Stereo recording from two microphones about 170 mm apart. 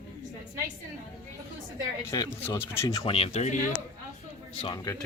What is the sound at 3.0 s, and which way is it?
Speech, 35° left (ahead or behind).